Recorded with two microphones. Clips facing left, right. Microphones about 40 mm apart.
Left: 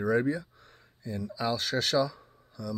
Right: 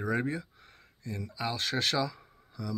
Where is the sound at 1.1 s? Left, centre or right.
Right.